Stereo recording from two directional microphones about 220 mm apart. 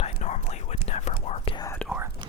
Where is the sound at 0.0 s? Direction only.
30° left (ahead or behind).